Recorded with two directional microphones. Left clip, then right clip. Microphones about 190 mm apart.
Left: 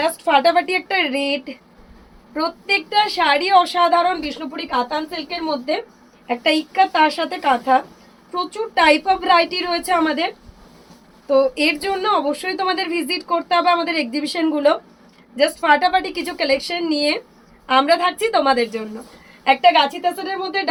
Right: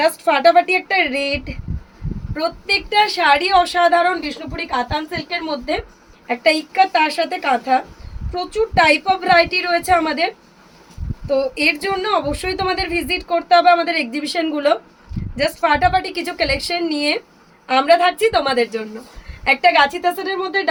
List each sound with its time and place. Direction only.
0.0 s a woman's voice: 15° right (ahead or behind)